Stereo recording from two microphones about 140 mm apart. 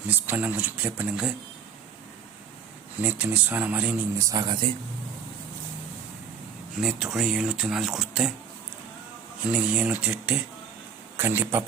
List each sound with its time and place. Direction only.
0.1 s speech: 10° right (ahead or behind)
3.0 s speech: 10° right (ahead or behind)
4.3 s speech: 30° right (ahead or behind)
6.8 s speech: 5° right (ahead or behind)
9.5 s speech: 5° right (ahead or behind)